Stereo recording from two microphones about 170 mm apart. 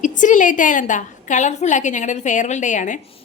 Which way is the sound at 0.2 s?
50° left (ahead or behind).